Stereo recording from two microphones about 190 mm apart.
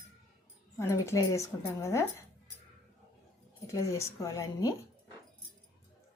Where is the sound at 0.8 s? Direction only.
15° left (ahead or behind).